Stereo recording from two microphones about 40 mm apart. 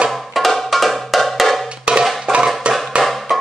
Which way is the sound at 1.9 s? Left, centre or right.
Right.